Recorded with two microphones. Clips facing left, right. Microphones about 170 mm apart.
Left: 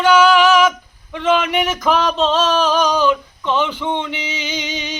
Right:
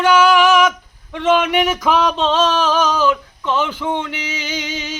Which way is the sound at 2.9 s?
5° right (ahead or behind).